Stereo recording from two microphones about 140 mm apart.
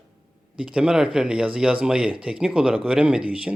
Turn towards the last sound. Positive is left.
turn(degrees=-5)  # may be behind; listen again after turning